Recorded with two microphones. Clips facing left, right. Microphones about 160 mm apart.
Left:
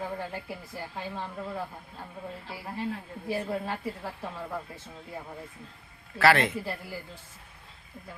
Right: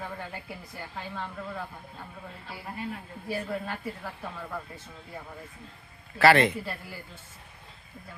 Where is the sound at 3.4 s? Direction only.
25° left (ahead or behind).